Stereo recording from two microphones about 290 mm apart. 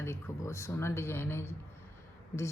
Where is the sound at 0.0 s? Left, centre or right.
Centre.